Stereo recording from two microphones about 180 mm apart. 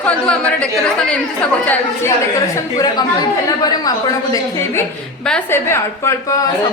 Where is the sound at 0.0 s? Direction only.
5° left (ahead or behind).